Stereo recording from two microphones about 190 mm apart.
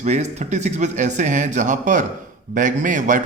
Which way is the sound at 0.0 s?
35° right (ahead or behind).